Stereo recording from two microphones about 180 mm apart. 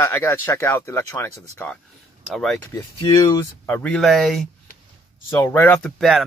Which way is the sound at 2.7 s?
20° left (ahead or behind).